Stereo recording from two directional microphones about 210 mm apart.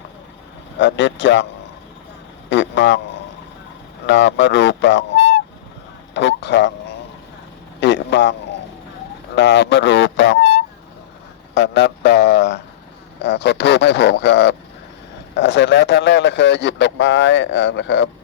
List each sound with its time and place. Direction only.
0.8 s a man's voice: 60° left (ahead or behind)
2.5 s a man's voice: 60° left (ahead or behind)
4.0 s a man's voice: 60° left (ahead or behind)
7.8 s a sound: 55° left (ahead or behind)
9.3 s speech: 55° left (ahead or behind)
11.5 s a sound: 55° left (ahead or behind)
13.2 s a man's voice: 55° left (ahead or behind)